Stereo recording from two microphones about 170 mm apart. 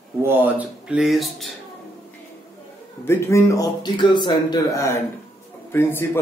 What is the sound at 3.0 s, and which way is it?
A man's voice, 15° left (ahead or behind).